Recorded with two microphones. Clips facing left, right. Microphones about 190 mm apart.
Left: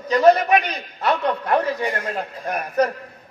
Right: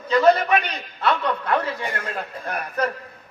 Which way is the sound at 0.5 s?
15° left (ahead or behind).